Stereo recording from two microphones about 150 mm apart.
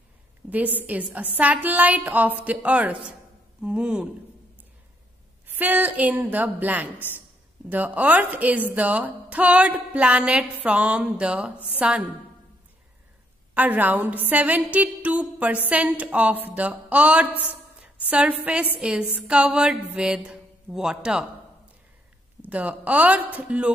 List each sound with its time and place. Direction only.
0.4 s a sound: 10° right (ahead or behind)
0.7 s a woman's voice: 10° right (ahead or behind)
5.5 s a woman's voice: 10° right (ahead or behind)
13.6 s a woman's voice: 10° right (ahead or behind)
17.7 s a sound: 10° right (ahead or behind)
18.4 s a woman's voice: 10° right (ahead or behind)
22.4 s a woman's voice: 10° right (ahead or behind)